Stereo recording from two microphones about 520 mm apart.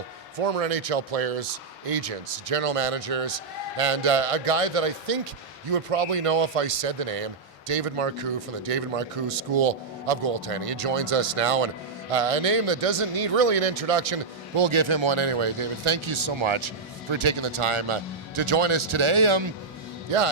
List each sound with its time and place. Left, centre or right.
0.3 s speech: right
20.1 s speech: right